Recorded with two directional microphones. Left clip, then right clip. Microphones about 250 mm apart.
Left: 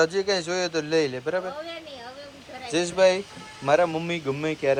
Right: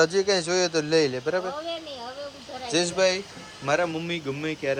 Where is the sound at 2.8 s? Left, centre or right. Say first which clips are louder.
Left 3 dB; centre.